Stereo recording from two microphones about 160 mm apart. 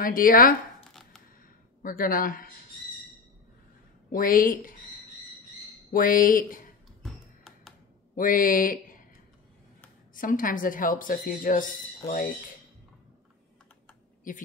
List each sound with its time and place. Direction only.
0.0 s speech: 60° left (ahead or behind)
1.8 s speech: 60° left (ahead or behind)
4.1 s speech: 60° left (ahead or behind)
5.9 s speech: 60° left (ahead or behind)
7.0 s music: centre (ahead or behind)
8.2 s speech: 60° left (ahead or behind)
10.1 s speech: 60° left (ahead or behind)
14.3 s speech: 55° left (ahead or behind)